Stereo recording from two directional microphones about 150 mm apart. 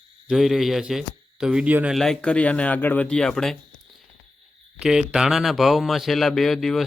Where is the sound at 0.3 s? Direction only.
Centre (ahead or behind).